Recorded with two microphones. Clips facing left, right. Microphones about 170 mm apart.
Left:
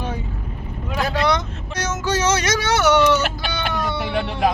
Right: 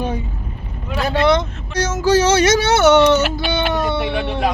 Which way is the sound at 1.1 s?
25° right (ahead or behind).